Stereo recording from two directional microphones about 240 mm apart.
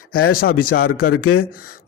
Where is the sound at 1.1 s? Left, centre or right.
Left.